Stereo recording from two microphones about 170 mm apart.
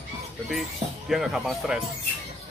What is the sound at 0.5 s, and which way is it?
Speech, centre (ahead or behind).